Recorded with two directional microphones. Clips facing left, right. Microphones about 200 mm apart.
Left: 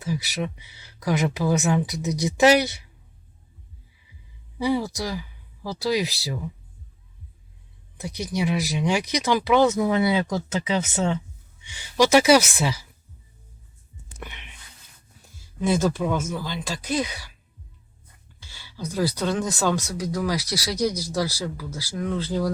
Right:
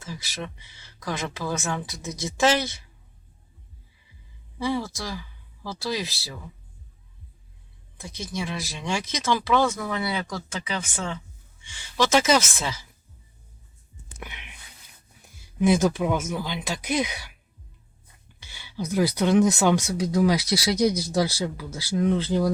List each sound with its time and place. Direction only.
0.0 s speech: 15° left (ahead or behind)
4.5 s speech: 15° left (ahead or behind)
8.0 s speech: 15° left (ahead or behind)
14.2 s speech: 5° right (ahead or behind)
18.4 s speech: 20° right (ahead or behind)